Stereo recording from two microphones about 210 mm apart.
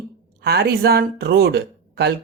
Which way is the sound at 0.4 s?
50° right (ahead or behind).